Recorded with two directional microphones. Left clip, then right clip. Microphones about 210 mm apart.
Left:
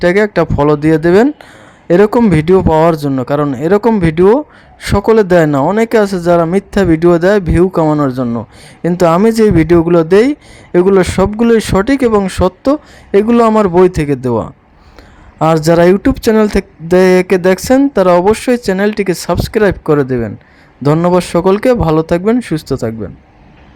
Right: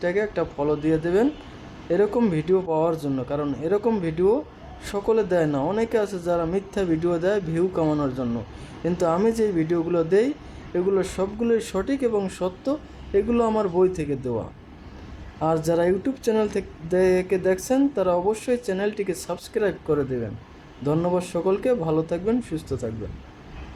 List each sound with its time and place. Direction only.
0.0 s speech: 45° left (ahead or behind)